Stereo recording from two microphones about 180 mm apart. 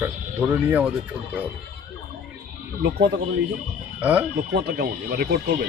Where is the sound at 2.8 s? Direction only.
65° right (ahead or behind).